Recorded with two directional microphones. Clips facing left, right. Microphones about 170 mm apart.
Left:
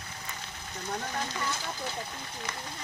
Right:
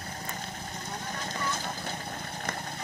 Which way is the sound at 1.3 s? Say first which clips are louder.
Right 1 dB; 50° right (ahead or behind).